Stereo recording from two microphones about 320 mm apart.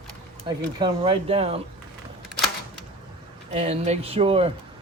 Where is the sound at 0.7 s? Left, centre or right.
Centre.